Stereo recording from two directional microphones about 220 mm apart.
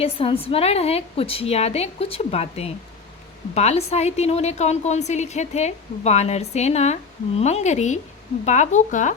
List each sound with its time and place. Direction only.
0.0 s a woman's voice: 25° left (ahead or behind)